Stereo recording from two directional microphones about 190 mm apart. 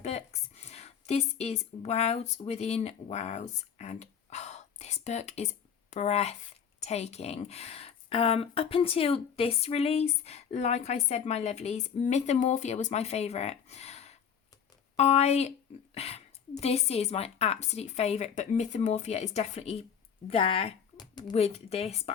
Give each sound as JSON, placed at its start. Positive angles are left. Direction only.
{"t": 0.0, "sound": "a woman's voice", "side_deg": 35}
{"t": 21.3, "sound": "speech", "side_deg": 35}